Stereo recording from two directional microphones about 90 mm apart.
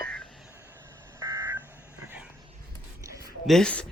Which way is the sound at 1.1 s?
35° right (ahead or behind).